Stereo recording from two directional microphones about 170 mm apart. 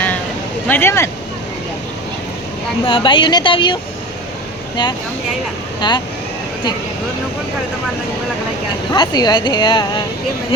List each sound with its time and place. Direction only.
0.7 s speech: 15° left (ahead or behind)
2.8 s speech: 30° left (ahead or behind)
5.8 s speech: 25° left (ahead or behind)
8.9 s speech: 25° left (ahead or behind)